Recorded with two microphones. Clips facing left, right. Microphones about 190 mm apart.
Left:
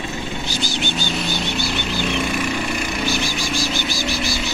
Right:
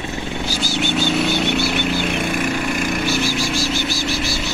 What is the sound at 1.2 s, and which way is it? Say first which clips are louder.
Bird flight: right 6 dB; 70° right (ahead or behind).